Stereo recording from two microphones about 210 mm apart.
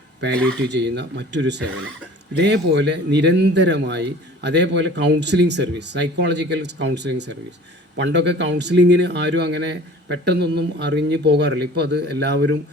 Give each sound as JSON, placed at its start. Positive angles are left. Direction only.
{"t": 0.7, "sound": "speech", "side_deg": -55}